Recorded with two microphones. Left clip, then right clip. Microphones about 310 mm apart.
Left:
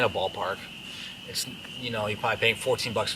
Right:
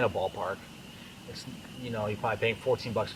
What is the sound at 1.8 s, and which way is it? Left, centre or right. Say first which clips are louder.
Speech: left 4 dB; centre.